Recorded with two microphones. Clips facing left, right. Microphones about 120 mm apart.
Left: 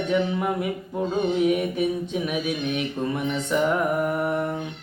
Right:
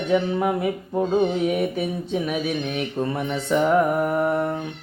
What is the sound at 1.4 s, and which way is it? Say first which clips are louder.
Speech: left 1 dB; 40° right (ahead or behind).